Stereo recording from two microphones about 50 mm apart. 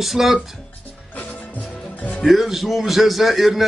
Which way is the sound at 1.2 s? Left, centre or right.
Left.